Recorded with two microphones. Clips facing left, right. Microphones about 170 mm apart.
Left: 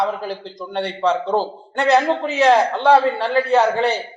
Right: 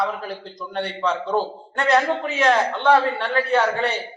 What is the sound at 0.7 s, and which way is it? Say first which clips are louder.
A man's voice: left 4 dB; 30° left (ahead or behind).